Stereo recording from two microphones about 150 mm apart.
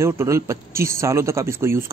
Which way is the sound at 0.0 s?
20° right (ahead or behind).